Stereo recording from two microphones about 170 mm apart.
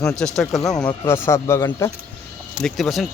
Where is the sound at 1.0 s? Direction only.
15° left (ahead or behind).